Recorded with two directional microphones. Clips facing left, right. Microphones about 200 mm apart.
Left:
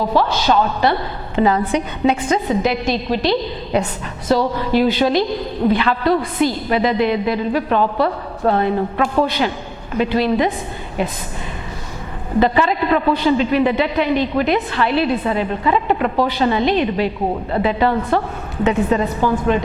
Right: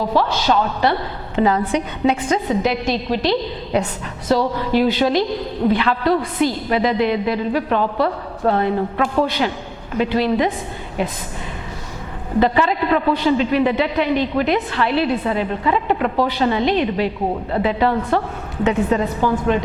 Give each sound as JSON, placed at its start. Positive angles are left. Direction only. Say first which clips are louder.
{"t": 0.2, "sound": "a woman's voice", "louder": "left 2 dB", "side_deg": 10}
{"t": 12.4, "sound": "a woman's voice", "louder": "left 1 dB", "side_deg": 15}